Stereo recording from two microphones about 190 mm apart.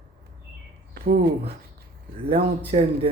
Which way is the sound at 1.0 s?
50° right (ahead or behind).